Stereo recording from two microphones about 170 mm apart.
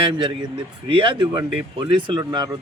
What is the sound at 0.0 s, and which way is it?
A man's voice, 30° right (ahead or behind).